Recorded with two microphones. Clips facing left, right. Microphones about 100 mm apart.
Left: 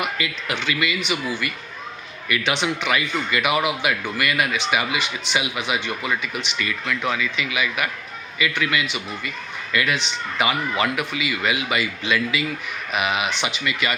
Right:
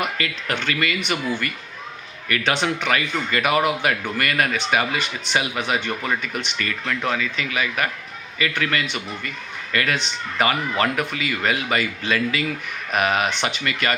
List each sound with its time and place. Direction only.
0.0 s speech: 45° right (ahead or behind)